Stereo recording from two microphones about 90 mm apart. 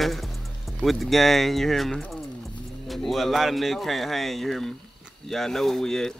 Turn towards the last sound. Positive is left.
turn(degrees=5)  # may be behind; listen again after turning